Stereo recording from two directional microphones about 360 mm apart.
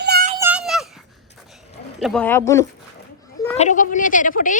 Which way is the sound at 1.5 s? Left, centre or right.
Centre.